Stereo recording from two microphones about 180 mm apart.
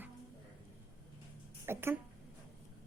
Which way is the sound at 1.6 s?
15° right (ahead or behind).